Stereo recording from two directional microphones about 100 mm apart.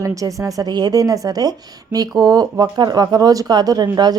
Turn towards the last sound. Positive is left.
turn(degrees=-40)  # may be behind; listen again after turning